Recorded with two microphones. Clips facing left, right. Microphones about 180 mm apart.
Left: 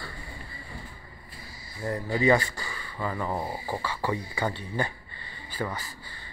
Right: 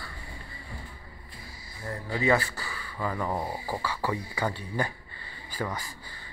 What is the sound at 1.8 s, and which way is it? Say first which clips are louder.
Speech: left 6 dB; 20° left (ahead or behind).